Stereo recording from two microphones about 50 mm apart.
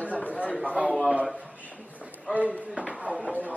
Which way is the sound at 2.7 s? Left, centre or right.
Right.